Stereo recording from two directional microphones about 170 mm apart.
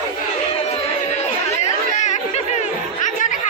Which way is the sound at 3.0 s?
50° left (ahead or behind).